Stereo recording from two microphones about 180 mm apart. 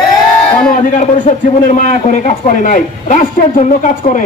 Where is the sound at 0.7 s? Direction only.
45° left (ahead or behind).